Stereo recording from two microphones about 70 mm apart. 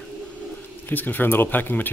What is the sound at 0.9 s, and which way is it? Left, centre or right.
Speech, left.